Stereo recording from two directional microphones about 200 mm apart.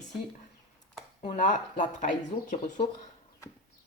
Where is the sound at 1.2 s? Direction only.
40° left (ahead or behind).